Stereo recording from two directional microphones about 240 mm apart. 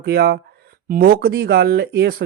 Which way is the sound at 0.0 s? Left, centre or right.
Right.